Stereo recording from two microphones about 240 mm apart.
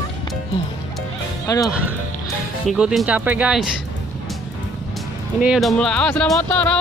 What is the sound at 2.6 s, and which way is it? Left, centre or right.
Speech, centre.